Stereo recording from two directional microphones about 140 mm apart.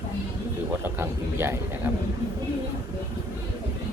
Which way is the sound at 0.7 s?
15° right (ahead or behind).